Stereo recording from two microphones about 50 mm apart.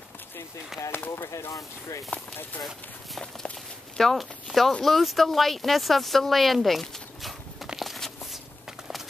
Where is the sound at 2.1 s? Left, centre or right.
Left.